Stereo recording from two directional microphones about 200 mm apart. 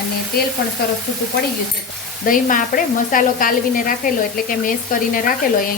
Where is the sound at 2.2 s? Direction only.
45° left (ahead or behind).